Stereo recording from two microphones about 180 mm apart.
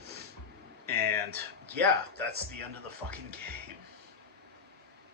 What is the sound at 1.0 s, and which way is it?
Speech, 60° right (ahead or behind).